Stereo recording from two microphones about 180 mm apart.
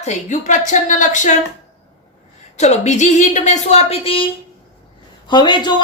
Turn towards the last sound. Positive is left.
turn(degrees=25)  # may be behind; listen again after turning